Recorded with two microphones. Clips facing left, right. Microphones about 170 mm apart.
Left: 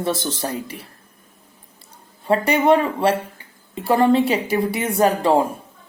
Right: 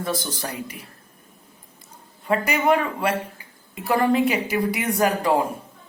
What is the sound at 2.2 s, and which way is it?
Speech, 30° left (ahead or behind).